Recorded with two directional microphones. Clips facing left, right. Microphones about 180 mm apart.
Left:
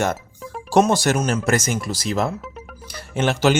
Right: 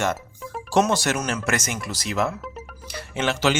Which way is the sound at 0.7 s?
40° left (ahead or behind).